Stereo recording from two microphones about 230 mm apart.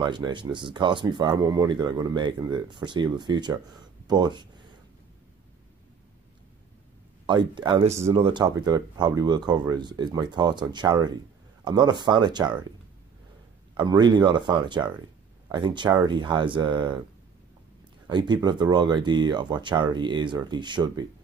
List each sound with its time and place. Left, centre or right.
0.0 s speech: centre
7.2 s speech: centre
13.7 s speech: centre
18.0 s speech: centre